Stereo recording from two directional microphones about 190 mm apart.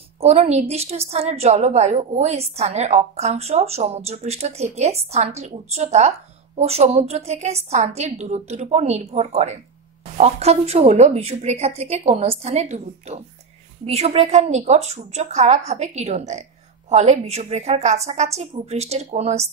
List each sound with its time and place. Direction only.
0.2 s a woman's voice: 35° right (ahead or behind)